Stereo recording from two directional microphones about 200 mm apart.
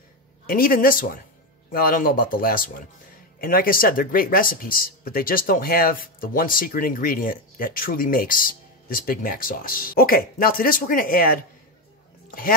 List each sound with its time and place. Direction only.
0.5 s speech: 45° left (ahead or behind)